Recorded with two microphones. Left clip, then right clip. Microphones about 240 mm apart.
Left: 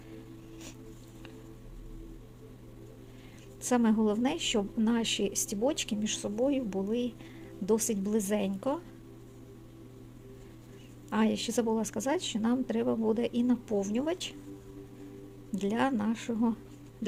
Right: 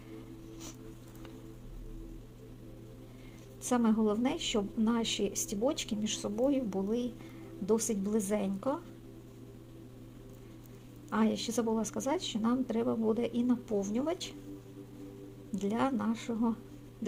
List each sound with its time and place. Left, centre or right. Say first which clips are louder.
3.6 s a woman's voice: left 2 dB; left
11.1 s a woman's voice: left 2 dB; left
15.5 s a woman's voice: left 2 dB; left